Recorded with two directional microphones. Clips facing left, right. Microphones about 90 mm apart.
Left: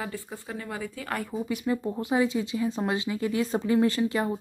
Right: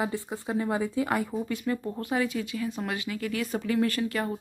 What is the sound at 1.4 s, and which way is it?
Speech, 15° left (ahead or behind).